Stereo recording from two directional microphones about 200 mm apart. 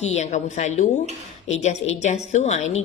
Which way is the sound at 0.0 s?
35° left (ahead or behind).